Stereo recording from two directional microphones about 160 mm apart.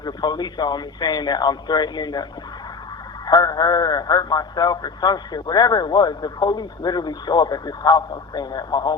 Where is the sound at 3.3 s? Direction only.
25° left (ahead or behind).